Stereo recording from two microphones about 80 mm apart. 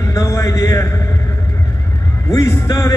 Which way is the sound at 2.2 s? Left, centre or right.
Left.